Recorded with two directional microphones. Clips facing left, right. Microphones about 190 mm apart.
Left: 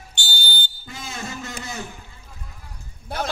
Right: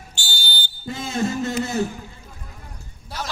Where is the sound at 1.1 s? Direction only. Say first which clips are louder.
Right 10 dB; 50° right (ahead or behind).